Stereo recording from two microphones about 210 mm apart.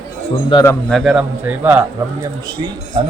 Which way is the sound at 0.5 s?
15° left (ahead or behind).